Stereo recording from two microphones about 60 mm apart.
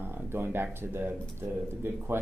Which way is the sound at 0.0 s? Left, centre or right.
Right.